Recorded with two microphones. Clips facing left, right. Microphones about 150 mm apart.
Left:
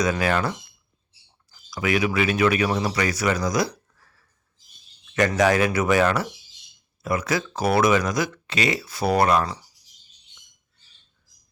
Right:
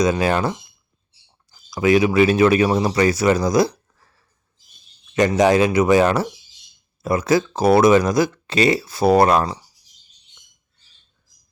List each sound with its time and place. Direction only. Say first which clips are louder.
0.0 s speech: right 4 dB; 25° right (ahead or behind)
5.1 s speech: right 4 dB; 20° right (ahead or behind)